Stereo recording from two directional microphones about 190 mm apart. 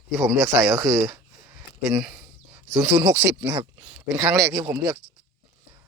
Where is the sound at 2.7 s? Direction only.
15° right (ahead or behind).